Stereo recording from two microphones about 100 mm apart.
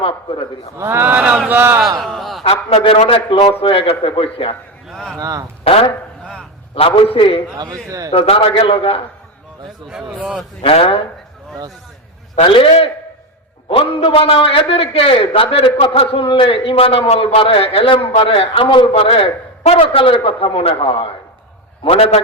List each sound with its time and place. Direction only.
0.0 s a man's voice: 65° left (ahead or behind)
0.8 s speech: 20° right (ahead or behind)
2.0 s speech: centre (ahead or behind)
2.4 s a man's voice: 85° left; by 3.5 s 55° left (ahead or behind)
3.6 s a man's voice: 65° left (ahead or behind)
4.9 s speech: 5° left (ahead or behind)
5.1 s speech: 40° right (ahead or behind)
5.6 s a man's voice: 70° left (ahead or behind)
7.6 s speech: 35° right (ahead or behind)
8.1 s a man's voice: 70° left (ahead or behind)
9.9 s speech: 5° right (ahead or behind)
10.6 s a man's voice: 65° left (ahead or behind)
12.4 s a man's voice: 65° left (ahead or behind)
21.8 s a man's voice: 85° left